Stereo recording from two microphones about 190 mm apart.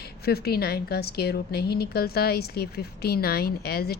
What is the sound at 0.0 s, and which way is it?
A woman's voice, 55° left (ahead or behind).